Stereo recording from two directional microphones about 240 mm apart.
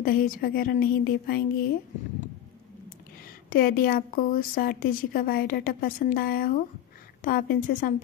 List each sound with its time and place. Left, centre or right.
0.0 s a woman's voice: left
3.4 s a woman's voice: left